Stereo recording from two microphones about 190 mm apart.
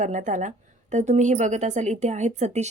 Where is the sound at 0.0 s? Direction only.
40° right (ahead or behind).